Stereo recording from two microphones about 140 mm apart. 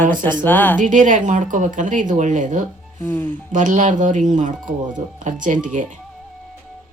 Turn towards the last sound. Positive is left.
turn(degrees=-65)  # may be behind; listen again after turning